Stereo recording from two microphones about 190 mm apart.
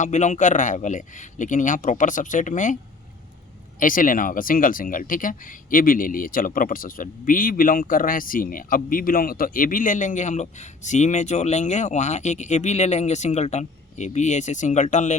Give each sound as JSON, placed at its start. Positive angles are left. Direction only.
{"t": 0.0, "sound": "speech", "side_deg": 40}
{"t": 3.8, "sound": "speech", "side_deg": 45}